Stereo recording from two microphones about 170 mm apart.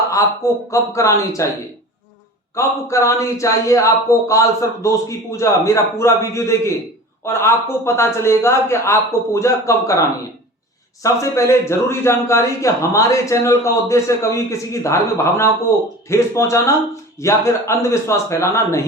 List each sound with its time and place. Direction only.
0.1 s a man's voice: 20° left (ahead or behind)
2.6 s a man's voice: 15° left (ahead or behind)
11.0 s a man's voice: 20° left (ahead or behind)